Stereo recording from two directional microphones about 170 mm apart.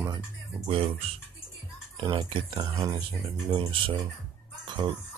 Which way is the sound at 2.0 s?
30° right (ahead or behind).